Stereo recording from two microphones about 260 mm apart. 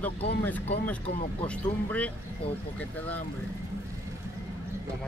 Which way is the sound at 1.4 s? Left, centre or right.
Centre.